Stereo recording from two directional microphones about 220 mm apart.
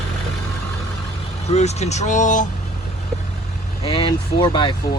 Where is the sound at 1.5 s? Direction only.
30° left (ahead or behind).